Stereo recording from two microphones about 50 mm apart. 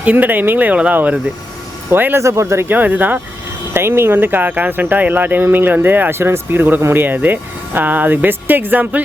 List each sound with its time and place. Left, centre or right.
0.0 s speech: right
1.9 s speech: right
2.1 s speech: right
2.6 s speech: right
3.8 s speech: right